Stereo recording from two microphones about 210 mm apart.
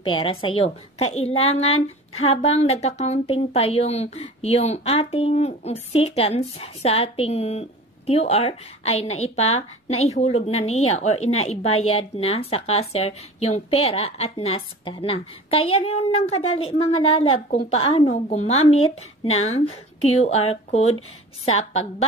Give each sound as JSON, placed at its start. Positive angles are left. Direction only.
{"t": 0.0, "sound": "a woman's voice", "side_deg": 25}